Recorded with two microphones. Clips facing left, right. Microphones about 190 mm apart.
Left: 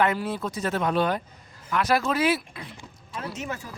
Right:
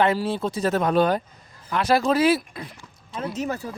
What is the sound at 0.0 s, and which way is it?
Speech, 30° right (ahead or behind).